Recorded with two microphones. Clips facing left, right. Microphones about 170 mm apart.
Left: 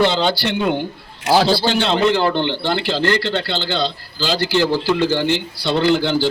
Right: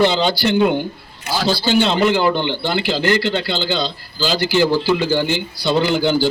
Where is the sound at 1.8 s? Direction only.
5° right (ahead or behind).